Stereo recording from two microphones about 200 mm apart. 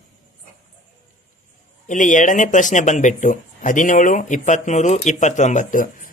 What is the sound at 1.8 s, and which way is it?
Speech, 40° left (ahead or behind).